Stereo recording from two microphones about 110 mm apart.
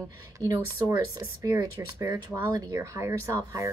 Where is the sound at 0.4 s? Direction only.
30° right (ahead or behind).